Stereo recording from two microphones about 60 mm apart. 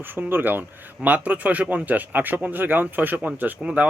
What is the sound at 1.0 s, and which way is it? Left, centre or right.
Speech, right.